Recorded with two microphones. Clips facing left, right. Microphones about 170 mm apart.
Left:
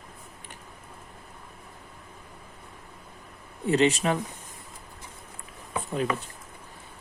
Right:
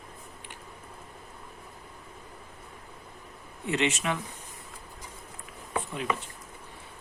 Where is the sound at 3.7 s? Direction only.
35° left (ahead or behind).